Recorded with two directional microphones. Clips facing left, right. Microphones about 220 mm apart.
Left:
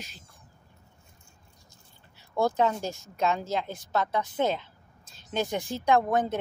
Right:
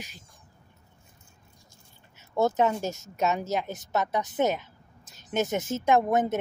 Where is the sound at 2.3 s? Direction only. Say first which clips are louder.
Right 1 dB; 20° right (ahead or behind).